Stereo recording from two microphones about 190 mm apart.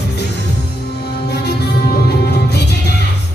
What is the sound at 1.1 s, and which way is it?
Music, 60° left (ahead or behind).